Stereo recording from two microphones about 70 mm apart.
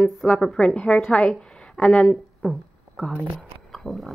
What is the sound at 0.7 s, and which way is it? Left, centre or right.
A woman's voice, centre.